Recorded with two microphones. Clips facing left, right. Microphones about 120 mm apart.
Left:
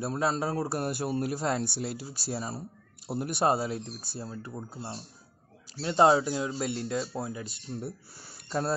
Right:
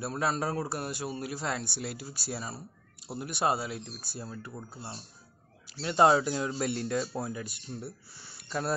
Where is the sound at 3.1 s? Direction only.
5° left (ahead or behind).